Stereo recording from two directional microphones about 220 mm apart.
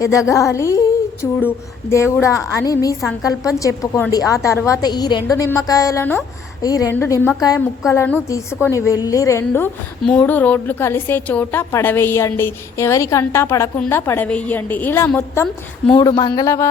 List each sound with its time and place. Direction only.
0.0 s a woman's voice: 15° left (ahead or behind)